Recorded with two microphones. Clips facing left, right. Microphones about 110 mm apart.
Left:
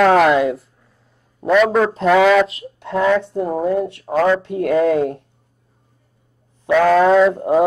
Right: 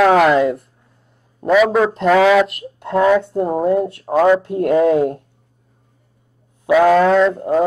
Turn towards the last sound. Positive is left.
turn(degrees=10)  # may be behind; listen again after turning